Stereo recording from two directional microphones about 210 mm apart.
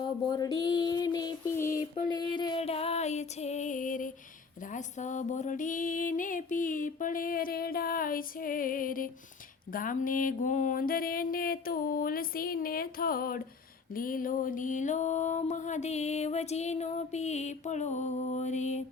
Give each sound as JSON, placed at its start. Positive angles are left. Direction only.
{"t": 0.0, "sound": "music", "side_deg": 20}
{"t": 2.0, "sound": "female singing", "side_deg": 20}
{"t": 4.6, "sound": "a sound", "side_deg": 35}
{"t": 13.9, "sound": "music", "side_deg": 40}